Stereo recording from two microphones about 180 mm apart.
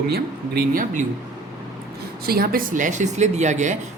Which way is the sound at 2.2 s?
55° right (ahead or behind).